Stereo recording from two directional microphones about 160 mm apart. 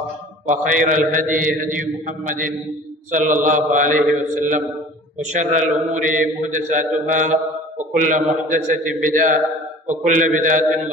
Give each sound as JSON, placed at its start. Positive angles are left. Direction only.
{"t": 0.5, "sound": "a man's voice", "side_deg": -55}